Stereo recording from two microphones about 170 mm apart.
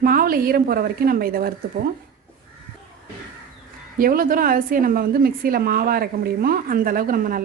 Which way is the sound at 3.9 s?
55° right (ahead or behind).